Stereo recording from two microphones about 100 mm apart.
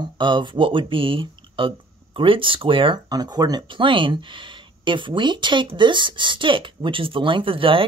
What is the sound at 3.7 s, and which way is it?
Speech, 55° right (ahead or behind).